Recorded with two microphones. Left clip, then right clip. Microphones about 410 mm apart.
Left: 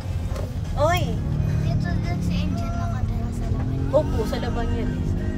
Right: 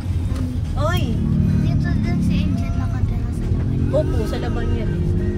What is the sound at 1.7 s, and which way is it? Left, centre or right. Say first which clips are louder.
Vehicle: right 4 dB; centre.